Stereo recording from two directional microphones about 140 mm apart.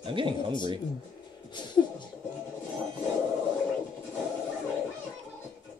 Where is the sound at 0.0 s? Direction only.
35° right (ahead or behind).